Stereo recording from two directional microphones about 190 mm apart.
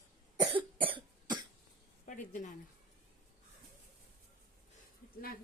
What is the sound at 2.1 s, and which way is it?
Speech, 45° left (ahead or behind).